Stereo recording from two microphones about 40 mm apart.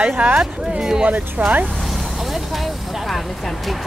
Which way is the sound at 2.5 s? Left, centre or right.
Centre.